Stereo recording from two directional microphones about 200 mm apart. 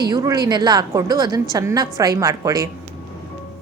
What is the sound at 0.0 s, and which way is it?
A woman's voice, 20° right (ahead or behind).